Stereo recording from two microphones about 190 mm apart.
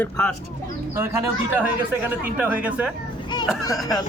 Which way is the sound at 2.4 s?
10° right (ahead or behind).